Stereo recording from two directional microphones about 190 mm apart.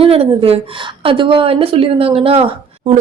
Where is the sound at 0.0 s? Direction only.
30° right (ahead or behind).